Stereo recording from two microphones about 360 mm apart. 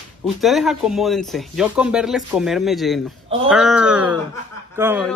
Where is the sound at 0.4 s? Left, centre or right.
Centre.